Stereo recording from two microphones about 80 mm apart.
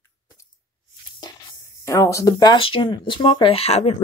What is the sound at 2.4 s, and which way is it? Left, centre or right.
Speech, left.